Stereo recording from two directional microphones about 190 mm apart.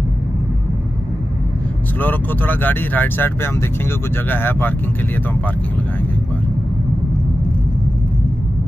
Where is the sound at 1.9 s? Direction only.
10° left (ahead or behind).